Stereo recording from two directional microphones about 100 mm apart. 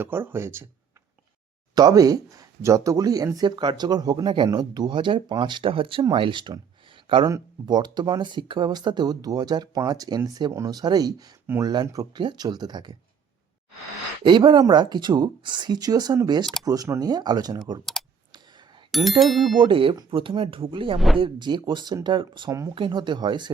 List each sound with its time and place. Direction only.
0.0 s speech: 20° right (ahead or behind)
1.7 s speech: 40° right (ahead or behind); by 7.2 s 60° right (ahead or behind)
7.7 s speech: 45° right (ahead or behind)
14.3 s speech: 50° right (ahead or behind)
18.0 s computer keyboard: centre (ahead or behind)
18.9 s speech: centre (ahead or behind)
19.4 s speech: 55° right (ahead or behind)
22.4 s speech: 35° right (ahead or behind)
22.7 s speech: 50° right (ahead or behind)